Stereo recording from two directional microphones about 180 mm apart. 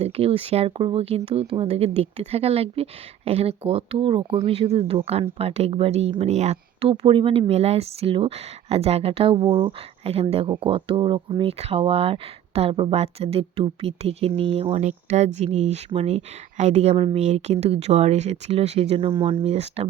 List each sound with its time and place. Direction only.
0.0 s speech: 35° right (ahead or behind)